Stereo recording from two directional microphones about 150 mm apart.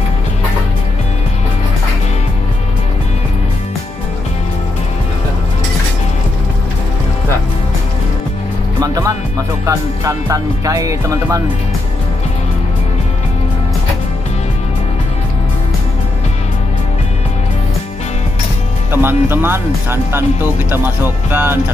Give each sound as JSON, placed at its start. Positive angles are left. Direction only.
{"t": 8.8, "sound": "music", "side_deg": -25}
{"t": 9.7, "sound": "speech", "side_deg": -20}
{"t": 18.9, "sound": "speech", "side_deg": -15}